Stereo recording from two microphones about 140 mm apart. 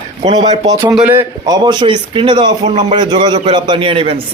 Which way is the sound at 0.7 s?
25° right (ahead or behind).